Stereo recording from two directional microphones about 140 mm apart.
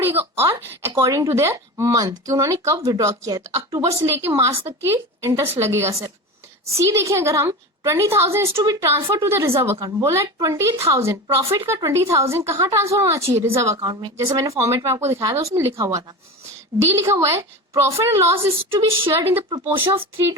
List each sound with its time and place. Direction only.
0.2 s speech: 20° right (ahead or behind)
18.7 s a woman's voice: 40° right (ahead or behind)
19.1 s speech: 15° right (ahead or behind)